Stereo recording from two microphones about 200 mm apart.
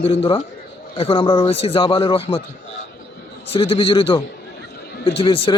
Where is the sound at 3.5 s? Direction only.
25° left (ahead or behind).